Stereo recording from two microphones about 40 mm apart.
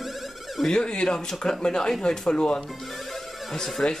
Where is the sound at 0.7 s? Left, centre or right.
Left.